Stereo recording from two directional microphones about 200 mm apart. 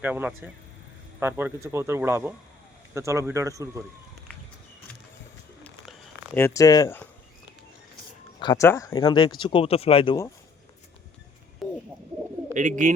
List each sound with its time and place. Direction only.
0.0 s speech: 10° right (ahead or behind)
6.3 s speech: 15° left (ahead or behind)
8.4 s speech: 20° left (ahead or behind)
11.6 s a sound: centre (ahead or behind)
12.5 s speech: 40° right (ahead or behind)